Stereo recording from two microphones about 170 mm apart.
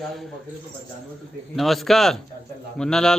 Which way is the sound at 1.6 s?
Centre (ahead or behind).